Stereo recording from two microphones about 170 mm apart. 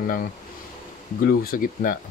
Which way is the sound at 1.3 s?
60° left (ahead or behind).